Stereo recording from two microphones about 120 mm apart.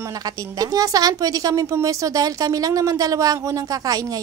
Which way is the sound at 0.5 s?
30° right (ahead or behind).